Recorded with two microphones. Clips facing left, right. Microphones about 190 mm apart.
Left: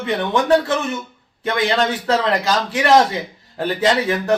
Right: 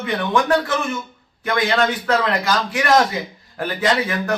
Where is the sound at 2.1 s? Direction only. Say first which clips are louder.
Left 1 dB; 30° left (ahead or behind).